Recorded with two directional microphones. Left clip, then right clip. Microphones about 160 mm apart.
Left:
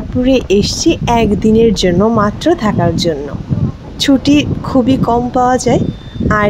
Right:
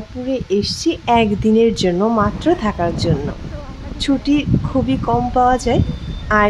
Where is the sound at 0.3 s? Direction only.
45° left (ahead or behind); by 3.1 s 25° left (ahead or behind).